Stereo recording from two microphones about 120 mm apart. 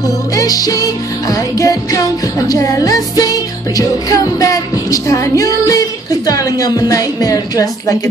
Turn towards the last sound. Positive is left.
turn(degrees=30)  # may be behind; listen again after turning